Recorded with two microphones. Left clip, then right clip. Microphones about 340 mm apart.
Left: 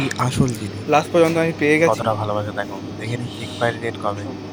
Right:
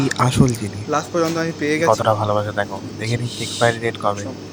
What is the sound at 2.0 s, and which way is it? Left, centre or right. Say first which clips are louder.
Speech: right 4 dB; left.